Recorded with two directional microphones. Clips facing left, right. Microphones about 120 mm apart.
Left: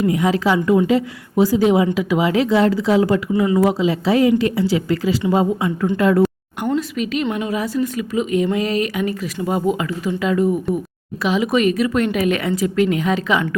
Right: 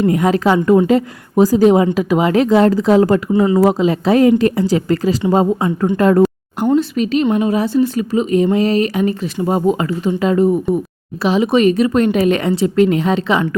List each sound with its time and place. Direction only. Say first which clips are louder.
0.0 s a woman's voice: right 3 dB; 50° right (ahead or behind)
3.3 s a woman's voice: right 4 dB; 30° right (ahead or behind)